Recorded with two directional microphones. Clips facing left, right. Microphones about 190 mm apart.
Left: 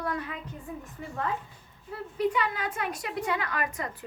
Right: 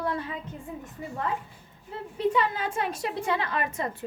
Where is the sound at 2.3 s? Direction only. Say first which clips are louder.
Right 3 dB; 30° right (ahead or behind).